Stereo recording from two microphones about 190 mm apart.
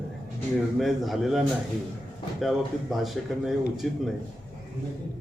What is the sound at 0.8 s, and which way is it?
Speech, centre (ahead or behind).